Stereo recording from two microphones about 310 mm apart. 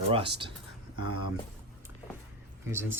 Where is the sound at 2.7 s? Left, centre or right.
Centre.